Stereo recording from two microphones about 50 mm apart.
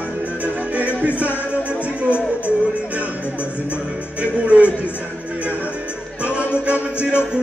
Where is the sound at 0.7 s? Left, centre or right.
Right.